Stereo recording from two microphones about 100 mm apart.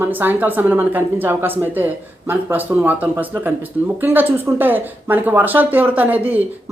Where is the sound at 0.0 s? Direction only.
20° right (ahead or behind).